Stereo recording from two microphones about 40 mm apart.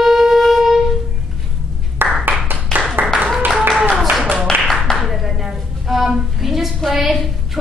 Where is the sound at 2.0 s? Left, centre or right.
Right.